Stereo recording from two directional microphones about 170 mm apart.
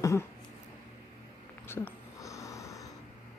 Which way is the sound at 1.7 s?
15° left (ahead or behind).